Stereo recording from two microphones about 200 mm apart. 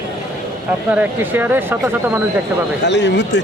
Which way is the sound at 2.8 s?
60° left (ahead or behind).